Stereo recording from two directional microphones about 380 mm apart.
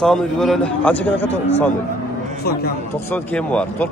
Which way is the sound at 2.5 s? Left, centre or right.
Left.